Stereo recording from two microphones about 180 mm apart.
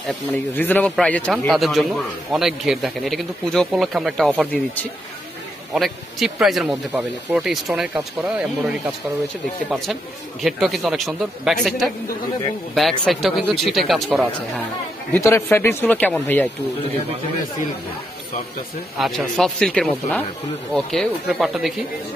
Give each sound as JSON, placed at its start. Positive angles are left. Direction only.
{"t": 0.6, "sound": "a man's voice", "side_deg": 10}
{"t": 5.8, "sound": "a man's voice", "side_deg": 0}
{"t": 10.4, "sound": "a man's voice", "side_deg": 0}
{"t": 15.1, "sound": "speech", "side_deg": 15}
{"t": 18.9, "sound": "a man's voice", "side_deg": 0}